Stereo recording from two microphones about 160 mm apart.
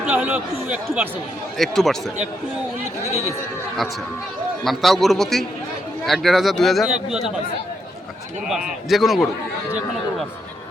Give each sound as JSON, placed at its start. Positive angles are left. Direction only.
{"t": 0.0, "sound": "speech", "side_deg": -10}
{"t": 1.5, "sound": "speech", "side_deg": 0}
{"t": 3.1, "sound": "speech", "side_deg": -20}
{"t": 4.6, "sound": "speech", "side_deg": 0}
{"t": 8.4, "sound": "speech", "side_deg": -5}